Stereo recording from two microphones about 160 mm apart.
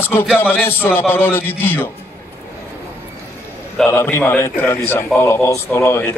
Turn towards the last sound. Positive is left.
turn(degrees=15)  # may be behind; listen again after turning